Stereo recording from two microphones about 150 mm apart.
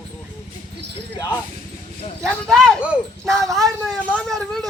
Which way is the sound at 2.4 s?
Centre (ahead or behind).